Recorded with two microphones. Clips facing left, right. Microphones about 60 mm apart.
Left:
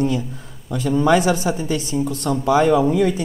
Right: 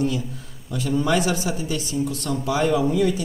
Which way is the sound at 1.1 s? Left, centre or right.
Left.